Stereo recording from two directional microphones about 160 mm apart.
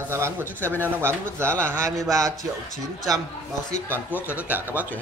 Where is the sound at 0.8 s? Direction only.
15° right (ahead or behind).